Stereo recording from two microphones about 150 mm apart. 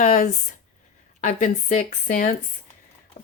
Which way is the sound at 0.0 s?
60° left (ahead or behind).